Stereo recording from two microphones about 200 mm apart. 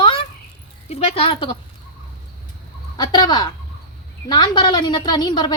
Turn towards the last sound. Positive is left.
turn(degrees=20)  # may be behind; listen again after turning